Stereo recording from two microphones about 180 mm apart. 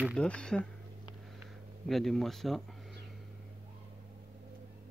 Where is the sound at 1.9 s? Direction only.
Centre (ahead or behind).